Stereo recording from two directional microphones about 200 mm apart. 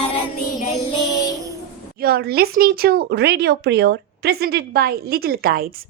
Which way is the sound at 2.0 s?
50° right (ahead or behind).